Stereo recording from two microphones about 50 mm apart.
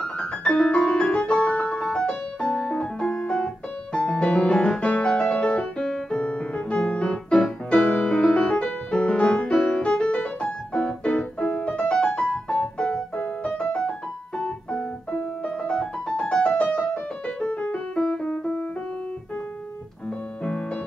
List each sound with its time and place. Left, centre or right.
0.0 s piano: centre
1.8 s music: centre
5.9 s piano: centre
7.7 s music: centre
14.4 s piano: centre
16.9 s music: left
18.1 s keyboard: centre